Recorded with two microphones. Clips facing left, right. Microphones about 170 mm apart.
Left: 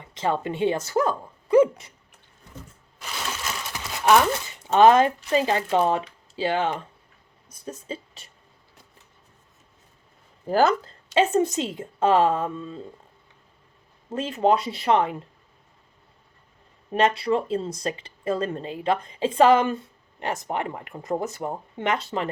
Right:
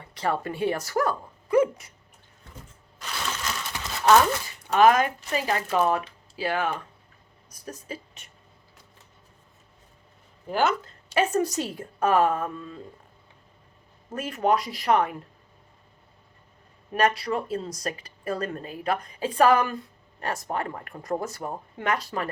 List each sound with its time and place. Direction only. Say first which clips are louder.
0.0 s speech: left 2 dB; 20° left (ahead or behind)
4.0 s speech: even; 25° left (ahead or behind)
10.5 s speech: left 4 dB; 35° left (ahead or behind)
11.1 s speech: left 3 dB; 25° left (ahead or behind)
14.1 s speech: left 3 dB; 25° left (ahead or behind)
16.9 s speech: left 3 dB; 30° left (ahead or behind)